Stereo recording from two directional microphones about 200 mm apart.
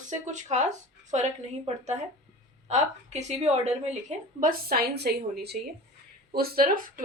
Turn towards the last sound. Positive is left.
turn(degrees=-45)  # may be behind; listen again after turning